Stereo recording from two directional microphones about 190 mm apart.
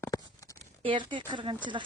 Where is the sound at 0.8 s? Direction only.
25° right (ahead or behind).